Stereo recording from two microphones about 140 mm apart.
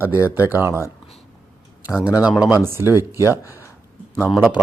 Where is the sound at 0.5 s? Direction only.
15° right (ahead or behind).